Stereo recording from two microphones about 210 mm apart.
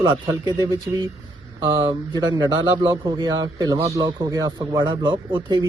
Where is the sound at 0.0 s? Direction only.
10° right (ahead or behind).